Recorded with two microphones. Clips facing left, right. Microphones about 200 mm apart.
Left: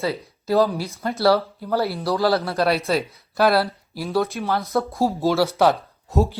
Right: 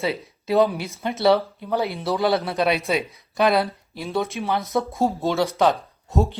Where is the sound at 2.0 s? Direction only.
Centre (ahead or behind).